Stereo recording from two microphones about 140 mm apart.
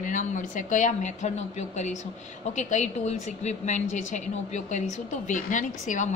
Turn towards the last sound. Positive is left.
turn(degrees=65)  # may be behind; listen again after turning